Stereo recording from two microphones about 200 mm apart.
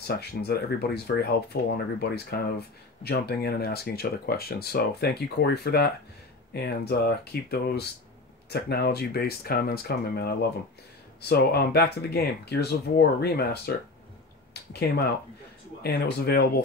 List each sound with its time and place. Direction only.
0.0 s speech: 55° left (ahead or behind)